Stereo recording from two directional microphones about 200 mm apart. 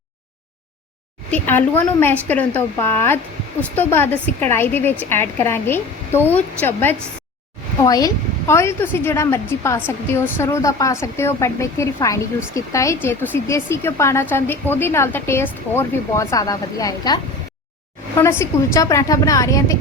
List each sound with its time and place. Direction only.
1.3 s a woman's voice: 10° left (ahead or behind)
18.2 s a woman's voice: 15° left (ahead or behind)